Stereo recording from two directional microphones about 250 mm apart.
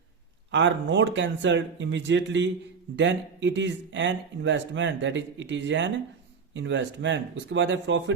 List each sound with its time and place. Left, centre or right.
0.5 s speech: right